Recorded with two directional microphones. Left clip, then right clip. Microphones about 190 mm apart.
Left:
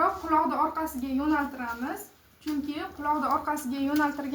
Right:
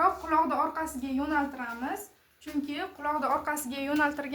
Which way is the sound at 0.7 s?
Centre (ahead or behind).